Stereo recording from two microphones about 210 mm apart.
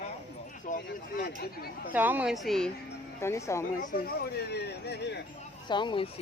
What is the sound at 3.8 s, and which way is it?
Speech, 45° left (ahead or behind).